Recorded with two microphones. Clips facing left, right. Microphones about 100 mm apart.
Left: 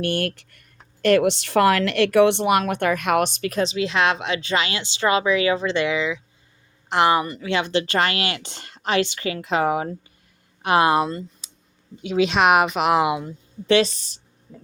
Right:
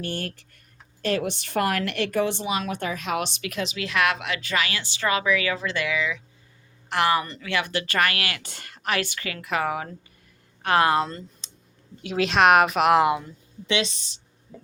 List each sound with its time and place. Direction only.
0.0 s a woman's voice: 75° left (ahead or behind); by 7.5 s 15° left (ahead or behind)
7.5 s a woman's voice: 25° left (ahead or behind)
11.4 s clicking: 10° left (ahead or behind)
12.0 s a woman's voice: centre (ahead or behind)
13.2 s a woman's voice: 40° left (ahead or behind)